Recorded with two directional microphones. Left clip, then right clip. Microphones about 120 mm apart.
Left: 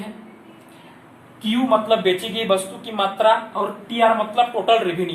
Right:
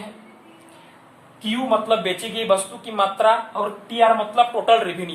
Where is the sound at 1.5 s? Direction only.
25° right (ahead or behind).